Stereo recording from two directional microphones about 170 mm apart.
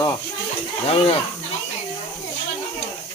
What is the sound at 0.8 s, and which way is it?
Speech, 35° left (ahead or behind).